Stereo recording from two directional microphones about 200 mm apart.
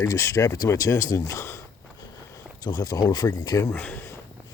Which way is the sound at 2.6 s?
20° left (ahead or behind).